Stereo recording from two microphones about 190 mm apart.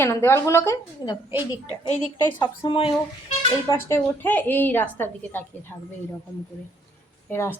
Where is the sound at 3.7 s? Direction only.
10° left (ahead or behind).